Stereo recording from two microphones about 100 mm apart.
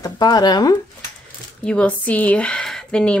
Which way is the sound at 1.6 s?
10° left (ahead or behind).